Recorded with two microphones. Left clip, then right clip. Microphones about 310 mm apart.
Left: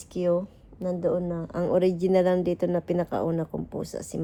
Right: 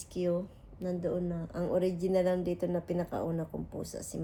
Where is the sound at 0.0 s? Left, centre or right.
Left.